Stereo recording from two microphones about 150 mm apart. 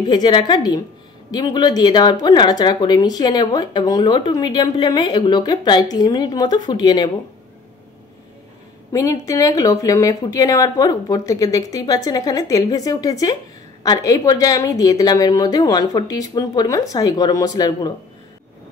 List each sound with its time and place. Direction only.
0.1 s speech: 30° left (ahead or behind)
8.9 s speech: 20° left (ahead or behind)